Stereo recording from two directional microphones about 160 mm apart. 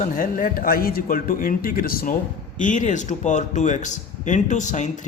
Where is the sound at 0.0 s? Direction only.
60° left (ahead or behind).